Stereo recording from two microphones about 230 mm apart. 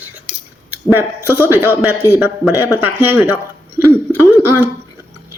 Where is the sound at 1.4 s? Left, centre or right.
Centre.